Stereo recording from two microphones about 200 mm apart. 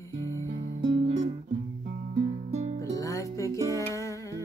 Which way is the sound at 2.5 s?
35° right (ahead or behind).